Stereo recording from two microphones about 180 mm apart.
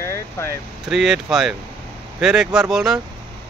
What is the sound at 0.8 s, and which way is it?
Speech, 5° right (ahead or behind).